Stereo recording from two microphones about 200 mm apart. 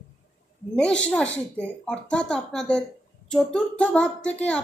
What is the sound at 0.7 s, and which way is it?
A woman's voice, 5° left (ahead or behind).